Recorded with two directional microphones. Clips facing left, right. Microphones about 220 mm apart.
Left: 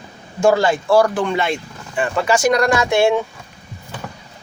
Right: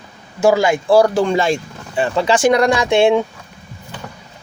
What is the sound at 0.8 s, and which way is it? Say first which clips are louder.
Speech: right 4 dB; 25° right (ahead or behind).